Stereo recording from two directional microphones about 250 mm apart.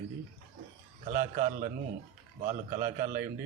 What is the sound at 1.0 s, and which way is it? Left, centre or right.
A man's voice, right.